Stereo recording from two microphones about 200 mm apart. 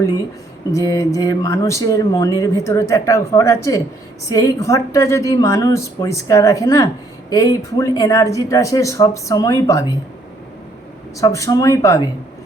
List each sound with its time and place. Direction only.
0.7 s a woman's voice: 15° left (ahead or behind)
11.2 s a woman's voice: 15° left (ahead or behind)